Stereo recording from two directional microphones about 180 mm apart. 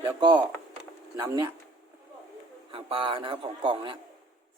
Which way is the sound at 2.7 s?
30° right (ahead or behind).